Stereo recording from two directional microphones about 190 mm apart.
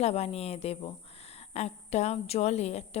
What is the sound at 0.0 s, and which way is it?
Speech, 35° left (ahead or behind).